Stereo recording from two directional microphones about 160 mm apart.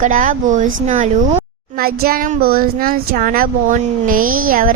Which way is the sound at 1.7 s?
70° right (ahead or behind).